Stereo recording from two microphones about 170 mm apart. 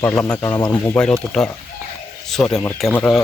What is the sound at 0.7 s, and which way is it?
Speech, 10° left (ahead or behind).